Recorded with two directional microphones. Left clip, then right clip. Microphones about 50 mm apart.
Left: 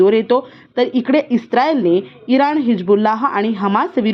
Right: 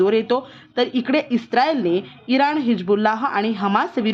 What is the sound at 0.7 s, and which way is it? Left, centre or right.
Speech, left.